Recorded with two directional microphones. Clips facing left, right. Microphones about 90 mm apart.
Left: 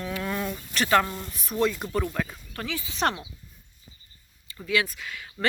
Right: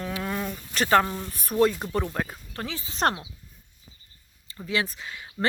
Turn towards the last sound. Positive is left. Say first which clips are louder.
# right 2 dB
turn(degrees=-25)  # may be behind; listen again after turning